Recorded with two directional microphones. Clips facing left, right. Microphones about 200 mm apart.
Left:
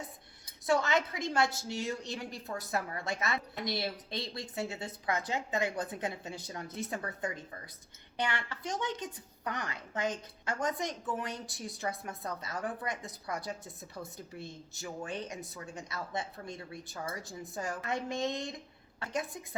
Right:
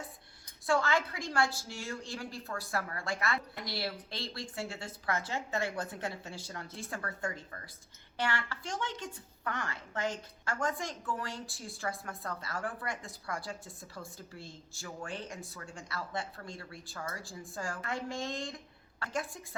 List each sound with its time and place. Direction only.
0.7 s a woman's voice: 20° left (ahead or behind)